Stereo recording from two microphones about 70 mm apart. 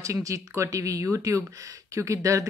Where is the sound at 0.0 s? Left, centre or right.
Right.